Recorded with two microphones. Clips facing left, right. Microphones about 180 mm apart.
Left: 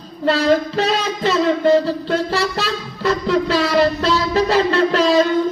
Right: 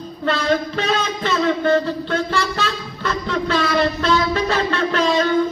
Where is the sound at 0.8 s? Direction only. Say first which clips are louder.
Left 2 dB; 35° left (ahead or behind).